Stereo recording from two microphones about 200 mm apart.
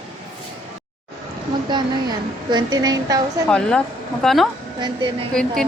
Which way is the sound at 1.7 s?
20° right (ahead or behind).